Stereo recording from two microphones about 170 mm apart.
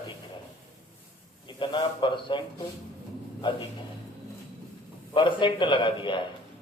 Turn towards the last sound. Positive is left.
turn(degrees=30)  # may be behind; listen again after turning